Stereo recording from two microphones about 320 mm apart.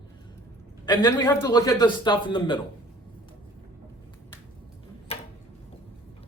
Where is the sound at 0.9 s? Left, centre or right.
Centre.